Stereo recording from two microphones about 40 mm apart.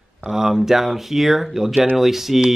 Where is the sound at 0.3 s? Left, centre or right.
Centre.